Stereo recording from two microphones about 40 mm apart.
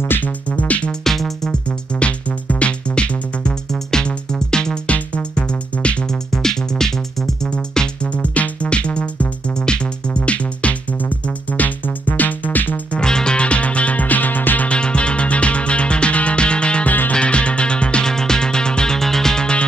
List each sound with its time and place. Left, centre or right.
0.2 s music: left
0.8 s music: centre
2.0 s music: left
4.8 s music: left
6.0 s music: centre
7.5 s music: left
8.1 s music: left
13.0 s music: centre; by 14.7 s left
14.7 s music: left
16.8 s music: left
17.1 s music: left; by 19.4 s centre